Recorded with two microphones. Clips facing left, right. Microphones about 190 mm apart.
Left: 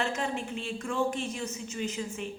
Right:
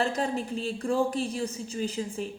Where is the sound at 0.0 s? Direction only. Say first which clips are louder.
Right 4 dB; 35° right (ahead or behind).